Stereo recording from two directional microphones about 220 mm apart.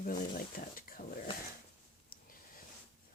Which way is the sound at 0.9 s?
40° left (ahead or behind).